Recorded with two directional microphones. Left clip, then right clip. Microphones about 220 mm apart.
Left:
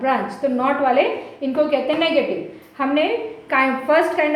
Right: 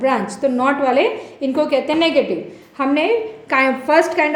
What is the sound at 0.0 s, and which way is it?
A woman's voice, 50° right (ahead or behind).